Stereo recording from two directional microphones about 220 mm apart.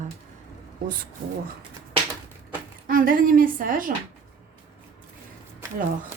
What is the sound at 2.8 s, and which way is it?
A woman's voice, 40° right (ahead or behind).